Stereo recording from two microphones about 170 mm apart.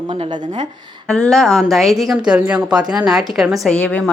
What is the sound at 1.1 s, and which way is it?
A woman's voice, 5° left (ahead or behind).